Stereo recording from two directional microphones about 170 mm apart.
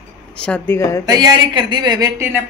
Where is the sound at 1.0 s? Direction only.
25° right (ahead or behind).